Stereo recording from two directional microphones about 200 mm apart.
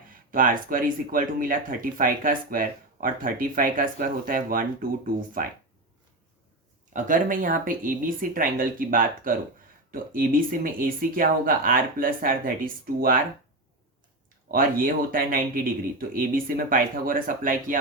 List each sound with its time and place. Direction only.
0.3 s speech: 45° right (ahead or behind)
6.9 s speech: 40° right (ahead or behind)
14.5 s speech: 45° right (ahead or behind)